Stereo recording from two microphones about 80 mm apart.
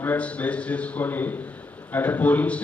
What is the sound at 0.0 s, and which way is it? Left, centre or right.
A man's voice, left.